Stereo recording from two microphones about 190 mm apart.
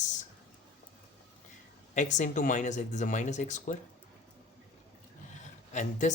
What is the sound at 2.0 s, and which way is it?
Speech, 40° left (ahead or behind).